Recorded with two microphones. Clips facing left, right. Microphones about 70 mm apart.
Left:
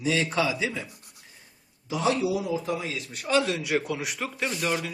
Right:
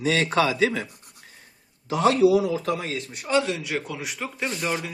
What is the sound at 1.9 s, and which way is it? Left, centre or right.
Speech, right.